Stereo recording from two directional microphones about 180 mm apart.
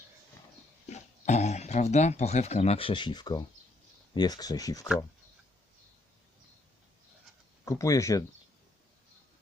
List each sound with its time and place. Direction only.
0.9 s speech: 40° left (ahead or behind); by 4.9 s 20° left (ahead or behind)
7.6 s speech: 15° left (ahead or behind)